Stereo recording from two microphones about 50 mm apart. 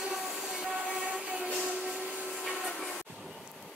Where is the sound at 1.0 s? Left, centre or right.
Right.